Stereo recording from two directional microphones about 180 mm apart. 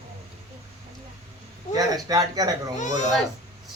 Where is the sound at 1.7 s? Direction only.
20° right (ahead or behind).